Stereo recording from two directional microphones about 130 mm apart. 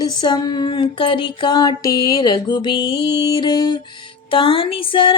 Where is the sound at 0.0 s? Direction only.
30° left (ahead or behind).